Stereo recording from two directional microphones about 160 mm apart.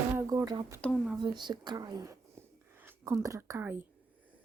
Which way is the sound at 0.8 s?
5° left (ahead or behind).